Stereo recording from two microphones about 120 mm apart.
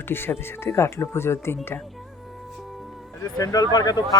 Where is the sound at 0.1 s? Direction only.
20° left (ahead or behind).